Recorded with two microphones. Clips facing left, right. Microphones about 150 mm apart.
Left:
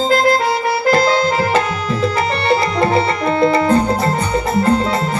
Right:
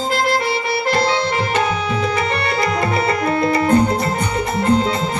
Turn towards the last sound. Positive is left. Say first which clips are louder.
# left 2 dB
turn(degrees=30)  # may be behind; listen again after turning